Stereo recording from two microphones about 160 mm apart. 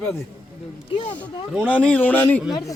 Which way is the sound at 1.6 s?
10° left (ahead or behind).